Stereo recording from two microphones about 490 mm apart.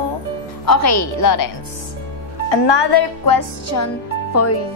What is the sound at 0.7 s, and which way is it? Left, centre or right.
Speech, left.